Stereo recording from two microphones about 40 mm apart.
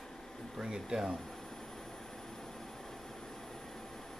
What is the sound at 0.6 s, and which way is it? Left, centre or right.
Speech, centre.